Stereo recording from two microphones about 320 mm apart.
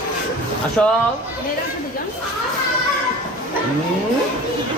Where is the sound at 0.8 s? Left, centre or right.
Centre.